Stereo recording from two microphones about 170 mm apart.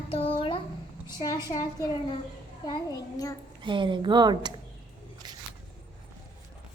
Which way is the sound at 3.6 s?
30° right (ahead or behind).